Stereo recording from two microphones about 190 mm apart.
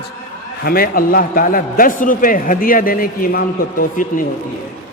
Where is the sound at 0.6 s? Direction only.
50° left (ahead or behind).